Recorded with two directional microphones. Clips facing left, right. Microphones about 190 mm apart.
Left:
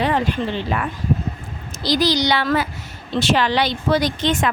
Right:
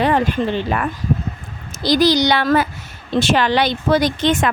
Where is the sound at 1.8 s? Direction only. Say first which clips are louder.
Right 4 dB; 50° right (ahead or behind).